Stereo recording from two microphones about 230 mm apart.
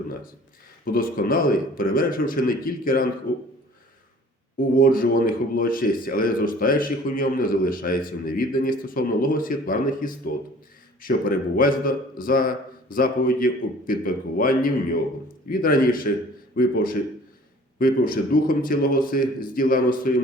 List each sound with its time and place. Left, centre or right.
0.9 s a man's voice: left
4.8 s a man's voice: left